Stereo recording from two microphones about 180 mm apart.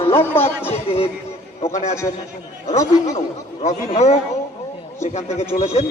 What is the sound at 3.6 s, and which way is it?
A man's voice, 40° left (ahead or behind).